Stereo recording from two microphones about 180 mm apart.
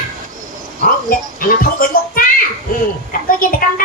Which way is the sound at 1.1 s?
50° left (ahead or behind).